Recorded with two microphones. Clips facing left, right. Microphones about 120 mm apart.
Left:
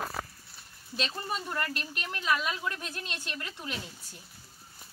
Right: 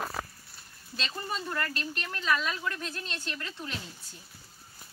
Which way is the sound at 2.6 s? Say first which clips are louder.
Right 1 dB; 20° left (ahead or behind).